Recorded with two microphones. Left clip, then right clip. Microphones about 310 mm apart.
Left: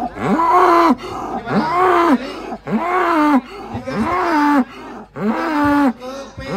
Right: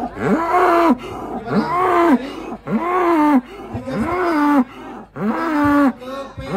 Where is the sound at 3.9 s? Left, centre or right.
Centre.